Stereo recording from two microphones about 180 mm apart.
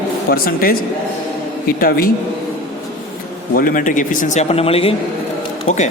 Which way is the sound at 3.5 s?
50° left (ahead or behind).